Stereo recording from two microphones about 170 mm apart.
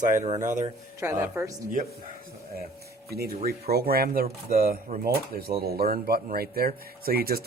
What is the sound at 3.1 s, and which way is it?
Speech, 65° right (ahead or behind).